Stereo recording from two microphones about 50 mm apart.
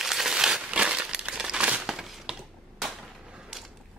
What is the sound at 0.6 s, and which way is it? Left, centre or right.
Crumpling, right.